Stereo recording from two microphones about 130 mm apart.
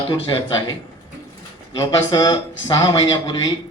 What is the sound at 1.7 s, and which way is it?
A man's voice, 25° left (ahead or behind).